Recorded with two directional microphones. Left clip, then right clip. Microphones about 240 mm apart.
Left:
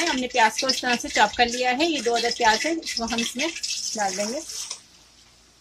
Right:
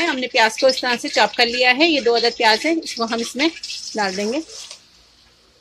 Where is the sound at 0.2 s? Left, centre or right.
Right.